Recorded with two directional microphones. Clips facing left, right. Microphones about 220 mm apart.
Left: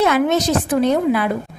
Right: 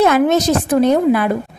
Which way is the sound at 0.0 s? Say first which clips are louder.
Right 3 dB; 45° right (ahead or behind).